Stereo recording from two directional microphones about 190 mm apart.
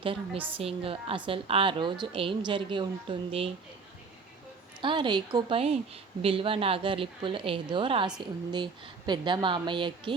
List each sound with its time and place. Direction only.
0.0 s a woman's voice: 30° right (ahead or behind)
4.8 s a woman's voice: 25° right (ahead or behind)